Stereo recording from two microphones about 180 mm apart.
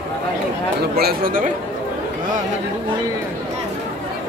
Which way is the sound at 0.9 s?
55° right (ahead or behind).